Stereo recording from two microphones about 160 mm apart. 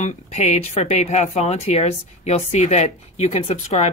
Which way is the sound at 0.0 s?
45° left (ahead or behind).